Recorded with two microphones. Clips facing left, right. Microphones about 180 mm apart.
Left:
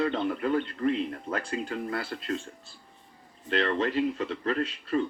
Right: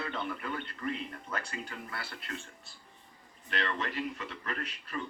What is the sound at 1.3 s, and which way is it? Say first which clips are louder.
Speech: left 8 dB; 55° left (ahead or behind).